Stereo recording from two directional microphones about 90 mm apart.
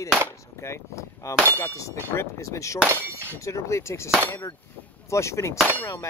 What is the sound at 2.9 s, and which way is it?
Speech, 25° right (ahead or behind).